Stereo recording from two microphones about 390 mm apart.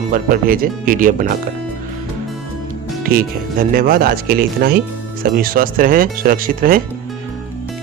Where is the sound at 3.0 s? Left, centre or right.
Right.